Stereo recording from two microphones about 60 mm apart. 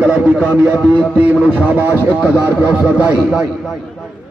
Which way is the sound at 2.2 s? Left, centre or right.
Right.